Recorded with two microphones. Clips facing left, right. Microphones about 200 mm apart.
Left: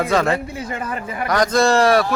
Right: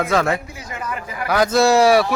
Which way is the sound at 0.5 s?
30° left (ahead or behind).